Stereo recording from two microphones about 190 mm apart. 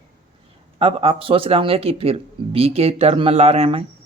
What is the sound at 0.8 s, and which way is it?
Speech, 30° right (ahead or behind).